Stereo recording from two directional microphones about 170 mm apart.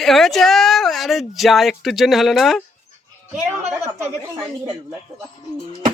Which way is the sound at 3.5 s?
15° right (ahead or behind).